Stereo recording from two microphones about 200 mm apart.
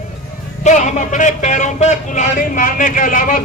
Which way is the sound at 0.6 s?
35° left (ahead or behind).